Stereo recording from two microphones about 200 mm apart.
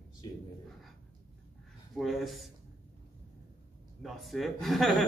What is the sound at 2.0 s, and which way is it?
Speech, centre (ahead or behind).